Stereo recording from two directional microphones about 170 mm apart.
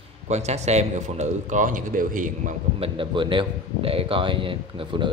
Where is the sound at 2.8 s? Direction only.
30° right (ahead or behind).